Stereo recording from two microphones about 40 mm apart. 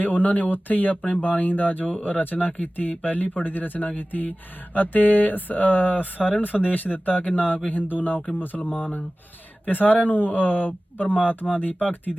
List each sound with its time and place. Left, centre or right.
0.0 s speech: left